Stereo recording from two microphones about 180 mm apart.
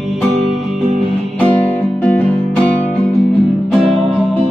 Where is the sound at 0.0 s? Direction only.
Centre (ahead or behind).